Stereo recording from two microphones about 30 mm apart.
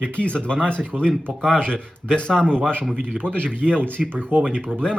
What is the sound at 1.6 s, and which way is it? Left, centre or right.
Speech, left.